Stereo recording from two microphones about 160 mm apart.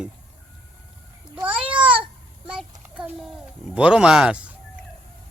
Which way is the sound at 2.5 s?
5° right (ahead or behind).